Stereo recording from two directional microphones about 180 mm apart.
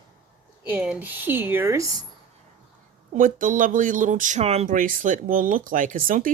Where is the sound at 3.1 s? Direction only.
50° right (ahead or behind).